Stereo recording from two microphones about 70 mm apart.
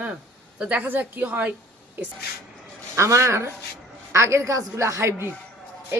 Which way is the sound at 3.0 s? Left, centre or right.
Right.